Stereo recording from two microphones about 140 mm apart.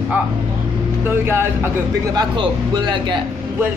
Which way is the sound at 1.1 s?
15° right (ahead or behind).